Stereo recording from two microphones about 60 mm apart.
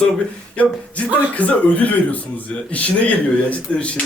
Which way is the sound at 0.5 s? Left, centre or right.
Left.